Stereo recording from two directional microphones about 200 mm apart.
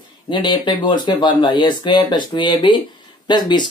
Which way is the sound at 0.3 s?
25° left (ahead or behind).